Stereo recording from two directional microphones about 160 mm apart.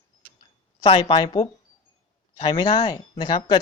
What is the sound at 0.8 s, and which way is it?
Speech, 35° left (ahead or behind).